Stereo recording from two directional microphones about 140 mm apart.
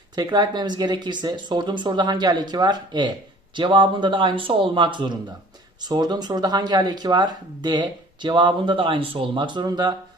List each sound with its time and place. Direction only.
0.2 s speech: 30° right (ahead or behind)